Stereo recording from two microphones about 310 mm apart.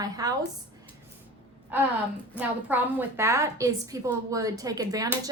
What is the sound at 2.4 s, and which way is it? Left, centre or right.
Speech, centre.